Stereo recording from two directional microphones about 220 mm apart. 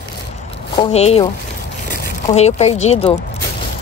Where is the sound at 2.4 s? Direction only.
30° left (ahead or behind).